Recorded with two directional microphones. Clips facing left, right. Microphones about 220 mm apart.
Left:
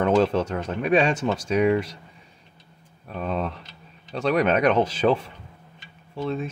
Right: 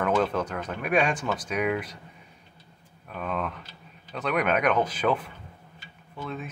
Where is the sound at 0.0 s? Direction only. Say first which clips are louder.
Left 5 dB; 25° left (ahead or behind).